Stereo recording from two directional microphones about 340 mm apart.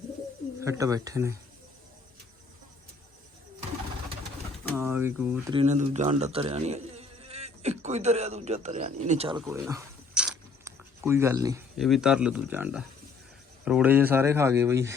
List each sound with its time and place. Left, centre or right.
0.6 s speech: centre
4.7 s speech: centre
9.4 s speech: centre